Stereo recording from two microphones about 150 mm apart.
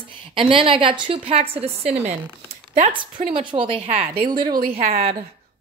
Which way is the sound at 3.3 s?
35° right (ahead or behind).